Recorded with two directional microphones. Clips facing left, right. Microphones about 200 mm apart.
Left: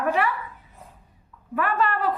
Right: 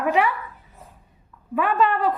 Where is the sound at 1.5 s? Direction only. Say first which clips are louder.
Right 4 dB; 20° right (ahead or behind).